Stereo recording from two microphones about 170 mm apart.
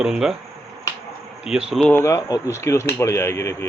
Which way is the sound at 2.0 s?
20° left (ahead or behind).